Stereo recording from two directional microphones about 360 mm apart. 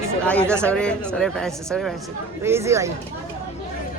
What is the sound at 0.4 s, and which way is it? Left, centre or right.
Speech, centre.